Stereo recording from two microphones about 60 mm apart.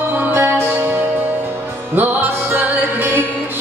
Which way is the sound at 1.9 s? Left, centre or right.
Right.